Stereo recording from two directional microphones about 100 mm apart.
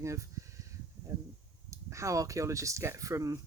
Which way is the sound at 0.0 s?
30° right (ahead or behind).